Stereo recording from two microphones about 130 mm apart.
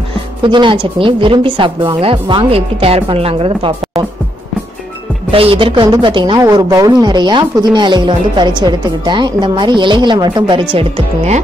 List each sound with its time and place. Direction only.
0.4 s speech: 40° right (ahead or behind)
5.3 s speech: 45° right (ahead or behind)